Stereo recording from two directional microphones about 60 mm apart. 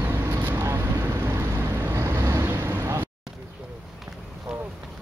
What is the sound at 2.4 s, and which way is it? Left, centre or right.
Vehicle, right.